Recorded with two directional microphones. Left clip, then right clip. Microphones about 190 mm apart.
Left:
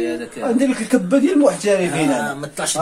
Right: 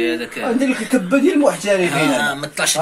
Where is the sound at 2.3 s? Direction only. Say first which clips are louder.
Right 5 dB; 55° left (ahead or behind).